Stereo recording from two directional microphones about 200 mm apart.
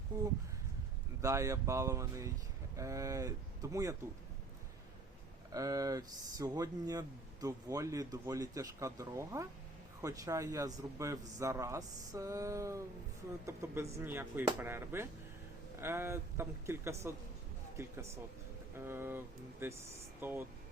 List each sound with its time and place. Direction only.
1.2 s a man's voice: 15° right (ahead or behind)
5.5 s a man's voice: 15° right (ahead or behind)